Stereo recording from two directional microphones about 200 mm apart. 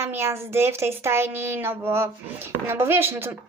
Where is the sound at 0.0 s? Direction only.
15° right (ahead or behind).